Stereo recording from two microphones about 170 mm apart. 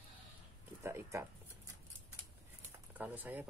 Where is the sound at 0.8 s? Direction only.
15° right (ahead or behind).